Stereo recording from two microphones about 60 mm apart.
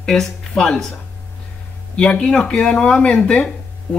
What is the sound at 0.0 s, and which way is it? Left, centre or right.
Speech, centre.